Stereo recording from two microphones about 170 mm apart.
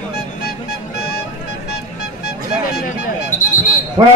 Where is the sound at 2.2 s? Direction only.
70° left (ahead or behind).